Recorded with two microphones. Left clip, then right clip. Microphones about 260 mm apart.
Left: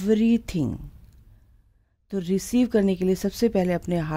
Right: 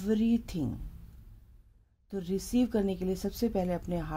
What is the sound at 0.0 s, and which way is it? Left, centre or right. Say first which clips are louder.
Speech: left 8 dB; left.